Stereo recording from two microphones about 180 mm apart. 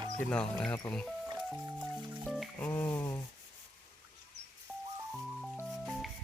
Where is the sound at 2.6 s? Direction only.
10° left (ahead or behind).